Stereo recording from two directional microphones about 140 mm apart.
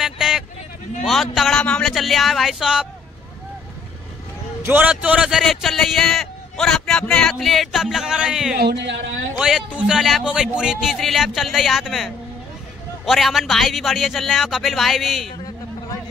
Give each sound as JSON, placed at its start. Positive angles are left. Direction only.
{"t": 0.0, "sound": "vehicle", "side_deg": -5}
{"t": 1.0, "sound": "a man's voice", "side_deg": 0}
{"t": 4.6, "sound": "a man's voice", "side_deg": -10}